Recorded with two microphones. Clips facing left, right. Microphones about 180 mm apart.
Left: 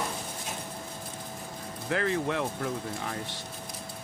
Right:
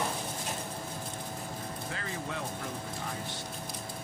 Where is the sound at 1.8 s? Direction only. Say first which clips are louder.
Left 13 dB; 70° left (ahead or behind).